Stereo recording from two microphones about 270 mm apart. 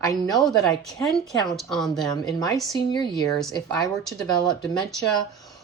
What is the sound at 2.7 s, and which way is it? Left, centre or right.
Speech, centre.